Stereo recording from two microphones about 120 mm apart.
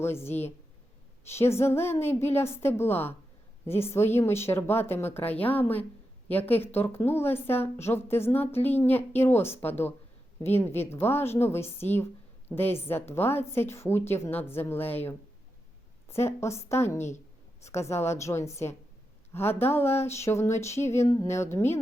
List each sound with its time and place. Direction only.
0.0 s a woman's voice: 20° left (ahead or behind)
20.8 s a sound: 70° left (ahead or behind)
21.1 s a woman's voice: 25° left (ahead or behind)